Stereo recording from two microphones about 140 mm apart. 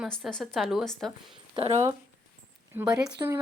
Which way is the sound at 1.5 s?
50° right (ahead or behind).